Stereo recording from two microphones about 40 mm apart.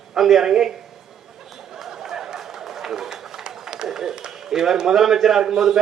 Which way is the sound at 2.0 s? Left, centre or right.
Centre.